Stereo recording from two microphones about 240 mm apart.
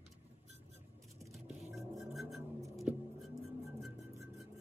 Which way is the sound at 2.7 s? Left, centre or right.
Centre.